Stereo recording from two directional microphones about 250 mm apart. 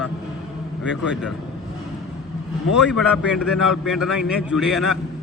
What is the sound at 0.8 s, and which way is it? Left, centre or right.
Speech, centre.